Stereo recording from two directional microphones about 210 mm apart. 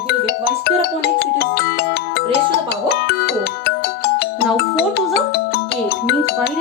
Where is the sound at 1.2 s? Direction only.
50° left (ahead or behind).